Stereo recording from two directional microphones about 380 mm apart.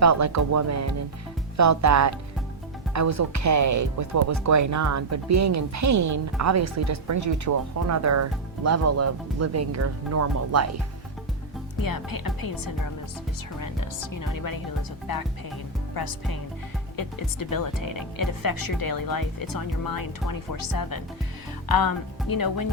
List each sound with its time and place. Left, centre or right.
0.0 s a woman's voice: right
11.8 s speech: left
17.0 s speech: left